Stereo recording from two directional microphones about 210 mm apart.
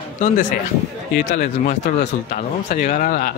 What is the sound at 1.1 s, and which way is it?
Speech, 40° left (ahead or behind).